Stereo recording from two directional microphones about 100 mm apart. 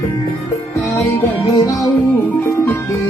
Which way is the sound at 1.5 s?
40° left (ahead or behind).